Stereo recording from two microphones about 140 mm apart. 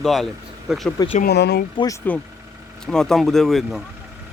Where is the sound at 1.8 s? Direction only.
35° left (ahead or behind).